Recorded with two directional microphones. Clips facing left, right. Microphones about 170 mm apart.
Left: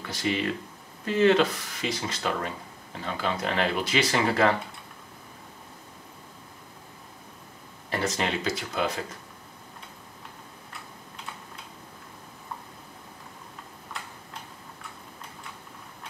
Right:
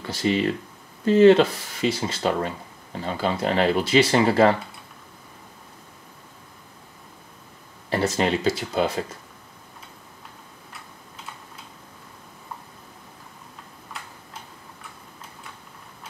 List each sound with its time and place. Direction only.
0.0 s speech: 30° right (ahead or behind)
7.9 s speech: 30° right (ahead or behind)